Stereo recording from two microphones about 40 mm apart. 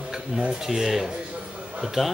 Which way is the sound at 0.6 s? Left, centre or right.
Centre.